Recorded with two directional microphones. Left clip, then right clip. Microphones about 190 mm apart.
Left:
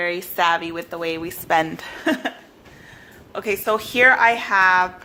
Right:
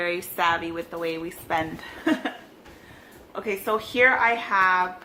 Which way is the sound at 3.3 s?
55° left (ahead or behind).